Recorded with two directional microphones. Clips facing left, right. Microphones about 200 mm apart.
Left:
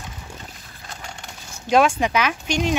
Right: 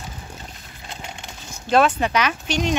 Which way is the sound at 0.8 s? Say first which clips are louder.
Right 2 dB; 20° right (ahead or behind).